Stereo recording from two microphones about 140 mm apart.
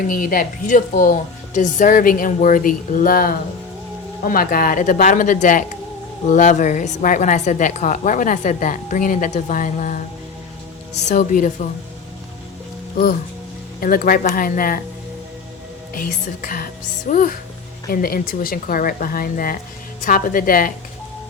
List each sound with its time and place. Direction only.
0.1 s a woman's voice: 80° left
1.5 s a woman's voice: 65° left (ahead or behind)
13.7 s a woman's voice: 90° left
16.0 s speech: 70° left (ahead or behind)
17.9 s speech: 90° left
20.0 s a woman's voice: 75° left (ahead or behind)